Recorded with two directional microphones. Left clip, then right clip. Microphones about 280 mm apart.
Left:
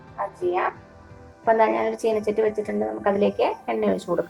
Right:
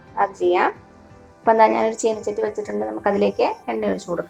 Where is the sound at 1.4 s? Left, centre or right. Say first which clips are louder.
Right 4 dB; centre.